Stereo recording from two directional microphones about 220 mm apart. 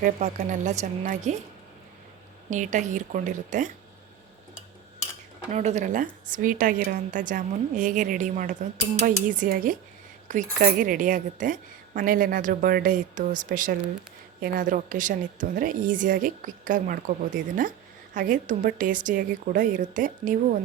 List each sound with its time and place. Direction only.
0.0 s speech: 35° right (ahead or behind)
2.5 s speech: 35° right (ahead or behind)
5.5 s speech: 30° right (ahead or behind)